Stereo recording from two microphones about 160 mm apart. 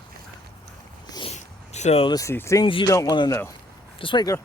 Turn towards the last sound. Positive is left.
turn(degrees=30)  # may be behind; listen again after turning